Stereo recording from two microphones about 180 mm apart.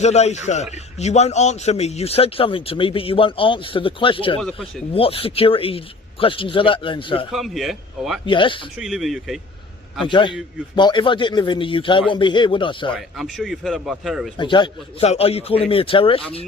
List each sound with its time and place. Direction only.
0.0 s a man's voice: 40° left (ahead or behind)
7.3 s speech: centre (ahead or behind)
8.3 s speech: 30° left (ahead or behind)
8.8 s speech: centre (ahead or behind)
10.1 s speech: 25° left (ahead or behind)
12.9 s speech: centre (ahead or behind)
14.3 s a man's voice: 25° left (ahead or behind)